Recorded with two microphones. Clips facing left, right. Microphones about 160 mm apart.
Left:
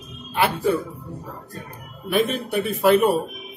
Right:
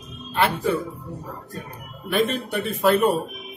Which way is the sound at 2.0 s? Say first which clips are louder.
Left 1 dB; 5° left (ahead or behind).